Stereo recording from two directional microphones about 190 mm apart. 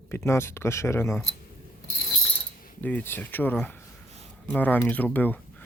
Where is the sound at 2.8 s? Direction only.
10° left (ahead or behind).